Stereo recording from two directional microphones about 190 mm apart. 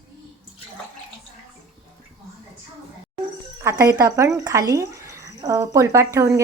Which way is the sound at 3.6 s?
15° right (ahead or behind).